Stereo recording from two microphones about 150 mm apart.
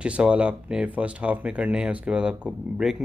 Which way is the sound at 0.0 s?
5° right (ahead or behind).